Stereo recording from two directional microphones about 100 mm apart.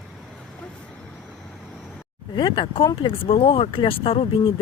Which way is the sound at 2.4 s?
55° left (ahead or behind).